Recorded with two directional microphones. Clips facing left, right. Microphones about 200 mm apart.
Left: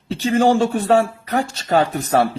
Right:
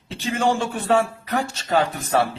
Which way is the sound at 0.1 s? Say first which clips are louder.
Left 6 dB; 35° left (ahead or behind).